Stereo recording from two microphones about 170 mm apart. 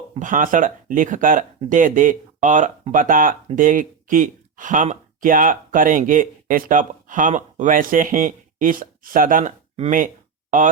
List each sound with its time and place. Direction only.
0.2 s speech: 50° right (ahead or behind)